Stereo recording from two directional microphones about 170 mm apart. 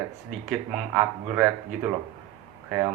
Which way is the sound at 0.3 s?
5° right (ahead or behind).